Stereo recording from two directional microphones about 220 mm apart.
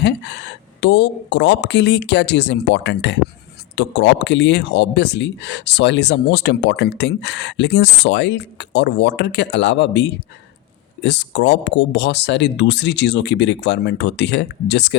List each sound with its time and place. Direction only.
0.0 s speech: 50° left (ahead or behind)